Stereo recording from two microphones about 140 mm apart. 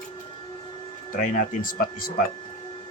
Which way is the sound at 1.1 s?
75° left (ahead or behind).